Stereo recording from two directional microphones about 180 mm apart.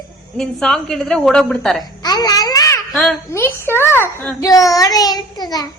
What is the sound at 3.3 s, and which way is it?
A woman's voice, 15° left (ahead or behind).